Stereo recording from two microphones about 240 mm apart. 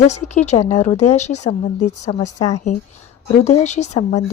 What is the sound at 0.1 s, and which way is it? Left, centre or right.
A woman's voice, left.